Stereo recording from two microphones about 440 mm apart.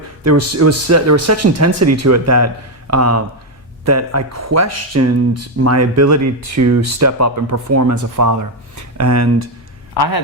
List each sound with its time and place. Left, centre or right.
0.3 s speech: right
9.9 s speech: left